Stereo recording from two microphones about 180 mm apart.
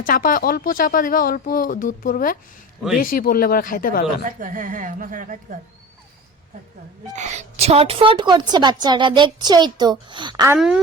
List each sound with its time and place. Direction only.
0.0 s speech: 50° left (ahead or behind)
4.4 s a woman's voice: 50° right (ahead or behind)
7.1 s a woman's voice: 40° right (ahead or behind)
10.5 s speech: 5° right (ahead or behind)